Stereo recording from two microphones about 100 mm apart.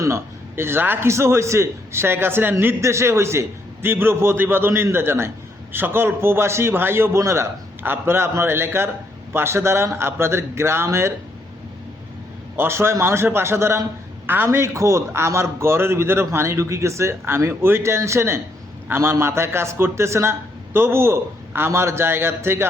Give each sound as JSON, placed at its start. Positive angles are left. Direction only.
{"t": 0.0, "sound": "a man's voice", "side_deg": -25}
{"t": 12.5, "sound": "a man's voice", "side_deg": -25}